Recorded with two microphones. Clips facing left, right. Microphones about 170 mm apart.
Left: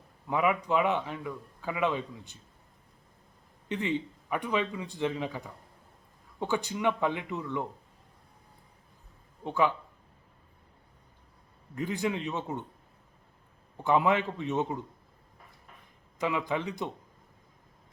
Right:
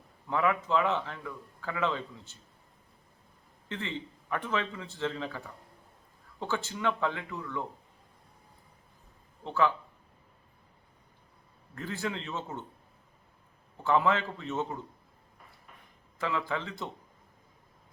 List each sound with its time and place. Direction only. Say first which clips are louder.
0.3 s a man's voice: left 1 dB; 15° left (ahead or behind)
3.7 s a man's voice: left 6 dB; 15° left (ahead or behind)
9.4 s a man's voice: left 1 dB; 15° left (ahead or behind)
11.7 s a man's voice: left 4 dB; 15° left (ahead or behind)
13.8 s a man's voice: left 1 dB; 15° left (ahead or behind)
16.1 s a man's voice: left 3 dB; 15° left (ahead or behind)